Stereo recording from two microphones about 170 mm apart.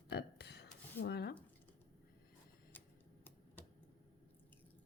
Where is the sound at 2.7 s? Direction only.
10° left (ahead or behind).